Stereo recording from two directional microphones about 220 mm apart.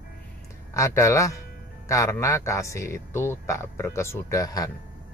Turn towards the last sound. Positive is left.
turn(degrees=15)  # may be behind; listen again after turning